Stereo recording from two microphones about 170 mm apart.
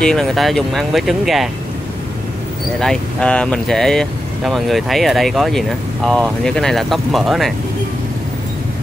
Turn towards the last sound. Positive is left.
turn(degrees=0)  # may be behind; listen again after turning